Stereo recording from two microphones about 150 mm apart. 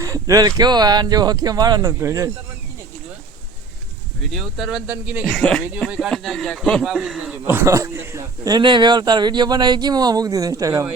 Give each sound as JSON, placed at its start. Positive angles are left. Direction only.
{"t": 0.0, "sound": "a man's voice", "side_deg": -20}
{"t": 4.2, "sound": "speech", "side_deg": 0}
{"t": 5.3, "sound": "speech", "side_deg": 5}
{"t": 7.4, "sound": "a man's voice", "side_deg": -15}